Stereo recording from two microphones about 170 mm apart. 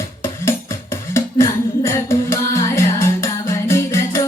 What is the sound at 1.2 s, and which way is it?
Music, 15° left (ahead or behind).